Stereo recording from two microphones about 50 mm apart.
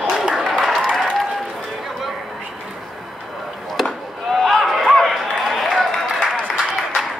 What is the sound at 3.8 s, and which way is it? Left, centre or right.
Chop, centre.